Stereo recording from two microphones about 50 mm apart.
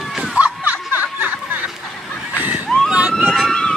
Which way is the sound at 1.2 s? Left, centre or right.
Right.